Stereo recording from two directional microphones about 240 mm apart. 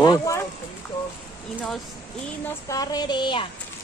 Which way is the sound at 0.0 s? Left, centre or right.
Centre.